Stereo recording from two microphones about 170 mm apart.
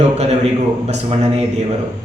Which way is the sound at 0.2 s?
40° right (ahead or behind).